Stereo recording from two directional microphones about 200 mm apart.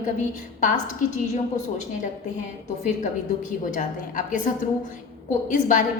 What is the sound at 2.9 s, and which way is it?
A woman's voice, 40° left (ahead or behind).